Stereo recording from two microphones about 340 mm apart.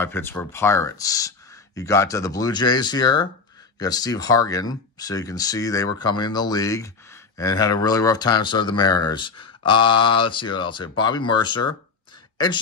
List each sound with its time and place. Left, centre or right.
0.0 s speech: centre